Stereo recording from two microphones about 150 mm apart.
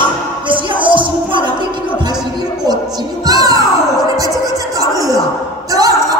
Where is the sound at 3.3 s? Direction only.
25° right (ahead or behind).